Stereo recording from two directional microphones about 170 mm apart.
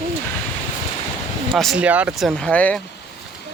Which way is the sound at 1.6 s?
5° right (ahead or behind).